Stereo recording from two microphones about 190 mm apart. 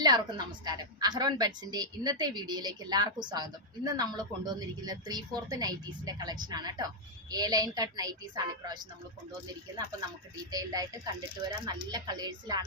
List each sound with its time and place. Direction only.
0.0 s a woman's voice: 20° right (ahead or behind)
10.5 s a woman's voice: 20° right (ahead or behind)